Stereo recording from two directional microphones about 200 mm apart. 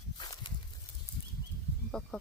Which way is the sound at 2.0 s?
5° left (ahead or behind).